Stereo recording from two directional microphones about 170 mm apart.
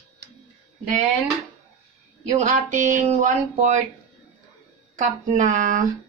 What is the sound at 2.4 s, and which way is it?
Speech, 50° right (ahead or behind).